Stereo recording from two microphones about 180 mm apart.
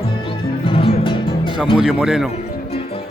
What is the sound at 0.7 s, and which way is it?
Music, 30° left (ahead or behind).